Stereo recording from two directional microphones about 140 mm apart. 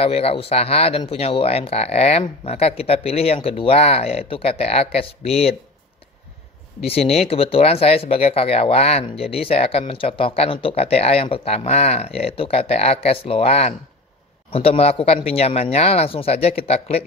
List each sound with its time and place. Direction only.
0.0 s speech: 45° left (ahead or behind)
6.9 s speech: 45° left (ahead or behind)